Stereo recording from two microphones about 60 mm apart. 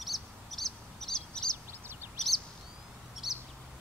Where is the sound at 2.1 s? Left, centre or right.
Centre.